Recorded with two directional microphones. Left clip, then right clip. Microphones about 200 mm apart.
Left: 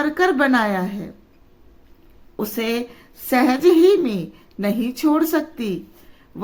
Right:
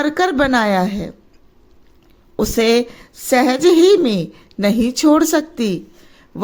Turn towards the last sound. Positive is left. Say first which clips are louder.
# right 5 dB
turn(degrees=-40)  # may be behind; listen again after turning